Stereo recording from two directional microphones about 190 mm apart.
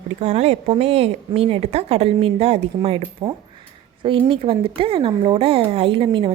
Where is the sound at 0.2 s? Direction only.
35° right (ahead or behind).